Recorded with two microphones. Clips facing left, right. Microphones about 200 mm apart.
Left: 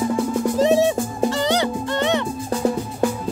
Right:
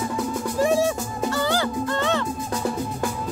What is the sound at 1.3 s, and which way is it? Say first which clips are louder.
Music: left 2 dB; 20° left (ahead or behind).